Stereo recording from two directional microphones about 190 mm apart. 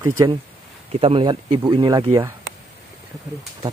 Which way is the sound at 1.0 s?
25° right (ahead or behind).